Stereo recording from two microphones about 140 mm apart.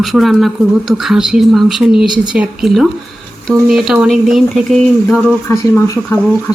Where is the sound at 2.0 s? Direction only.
30° right (ahead or behind).